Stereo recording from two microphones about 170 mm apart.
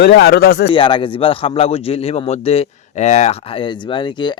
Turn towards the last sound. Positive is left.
turn(degrees=25)  # may be behind; listen again after turning